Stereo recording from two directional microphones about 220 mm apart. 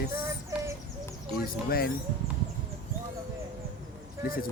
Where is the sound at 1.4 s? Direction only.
40° left (ahead or behind).